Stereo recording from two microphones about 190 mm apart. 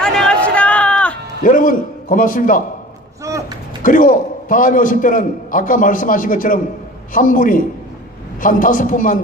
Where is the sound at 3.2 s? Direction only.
15° right (ahead or behind).